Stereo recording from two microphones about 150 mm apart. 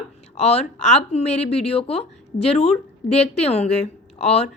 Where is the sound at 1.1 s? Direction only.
45° left (ahead or behind).